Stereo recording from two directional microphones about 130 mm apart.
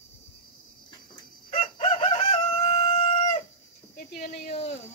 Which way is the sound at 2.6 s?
60° left (ahead or behind).